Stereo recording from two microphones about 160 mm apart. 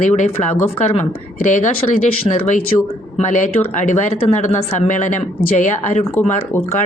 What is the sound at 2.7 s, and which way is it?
Speech, 35° left (ahead or behind).